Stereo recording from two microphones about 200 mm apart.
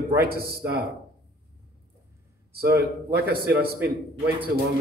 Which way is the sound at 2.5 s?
50° right (ahead or behind).